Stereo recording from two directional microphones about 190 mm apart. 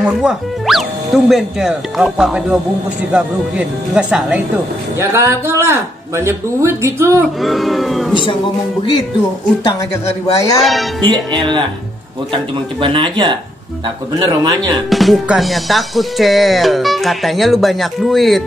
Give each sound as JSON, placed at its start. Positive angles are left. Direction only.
{"t": 0.2, "sound": "music", "side_deg": 0}
{"t": 4.9, "sound": "a man's voice", "side_deg": -15}
{"t": 7.4, "sound": "music", "side_deg": 0}
{"t": 10.2, "sound": "speech", "side_deg": 15}
{"t": 10.6, "sound": "music", "side_deg": 0}
{"t": 11.0, "sound": "music", "side_deg": -25}
{"t": 12.8, "sound": "music", "side_deg": -25}
{"t": 14.9, "sound": "music", "side_deg": 0}